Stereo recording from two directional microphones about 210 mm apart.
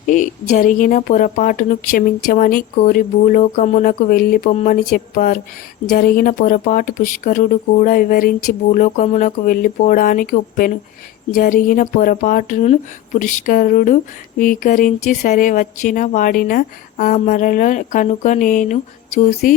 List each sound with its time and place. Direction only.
0.1 s speech: 35° left (ahead or behind)